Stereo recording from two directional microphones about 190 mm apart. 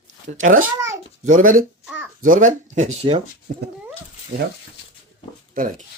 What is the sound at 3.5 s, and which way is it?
Speech, 45° right (ahead or behind).